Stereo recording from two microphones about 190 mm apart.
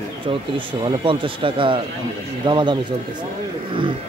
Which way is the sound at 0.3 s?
25° right (ahead or behind).